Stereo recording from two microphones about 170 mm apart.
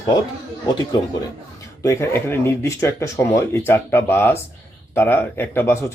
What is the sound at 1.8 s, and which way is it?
Speech, 15° left (ahead or behind).